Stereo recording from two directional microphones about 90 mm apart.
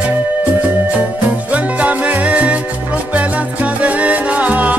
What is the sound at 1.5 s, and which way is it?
Music, 15° right (ahead or behind).